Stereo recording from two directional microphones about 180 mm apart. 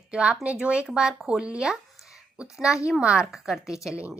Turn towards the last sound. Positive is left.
turn(degrees=-5)  # may be behind; listen again after turning